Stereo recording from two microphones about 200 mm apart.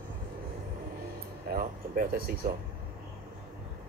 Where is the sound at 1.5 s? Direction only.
45° right (ahead or behind).